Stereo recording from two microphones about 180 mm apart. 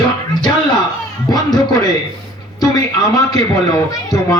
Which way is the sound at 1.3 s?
20° left (ahead or behind).